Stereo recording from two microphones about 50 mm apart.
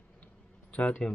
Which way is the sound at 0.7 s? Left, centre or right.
Left.